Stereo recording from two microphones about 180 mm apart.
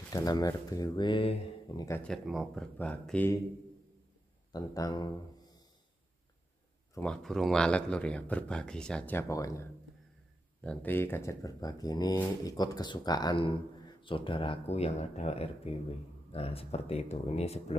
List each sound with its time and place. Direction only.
0.1 s speech: 20° left (ahead or behind)
2.0 s speech: centre (ahead or behind)
4.5 s speech: 20° left (ahead or behind)
6.9 s speech: 5° left (ahead or behind); by 17.7 s 35° left (ahead or behind)